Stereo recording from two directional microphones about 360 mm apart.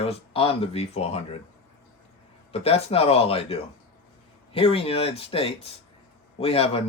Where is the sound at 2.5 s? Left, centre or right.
Centre.